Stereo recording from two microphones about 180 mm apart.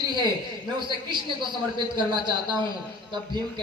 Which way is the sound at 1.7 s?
25° right (ahead or behind).